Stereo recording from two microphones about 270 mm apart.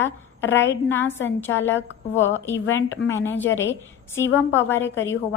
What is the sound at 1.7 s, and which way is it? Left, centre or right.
Speech, left.